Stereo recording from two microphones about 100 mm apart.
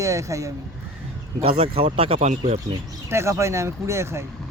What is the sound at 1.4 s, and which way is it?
Speech, 80° right.